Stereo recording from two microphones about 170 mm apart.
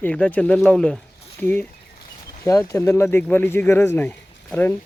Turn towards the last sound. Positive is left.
turn(degrees=10)  # may be behind; listen again after turning